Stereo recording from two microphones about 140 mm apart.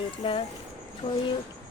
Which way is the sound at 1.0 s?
50° left (ahead or behind).